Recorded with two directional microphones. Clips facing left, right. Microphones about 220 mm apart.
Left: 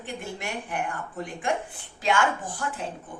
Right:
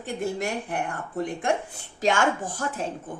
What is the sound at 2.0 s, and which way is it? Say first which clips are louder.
Speech: right 2 dB; 45° right (ahead or behind).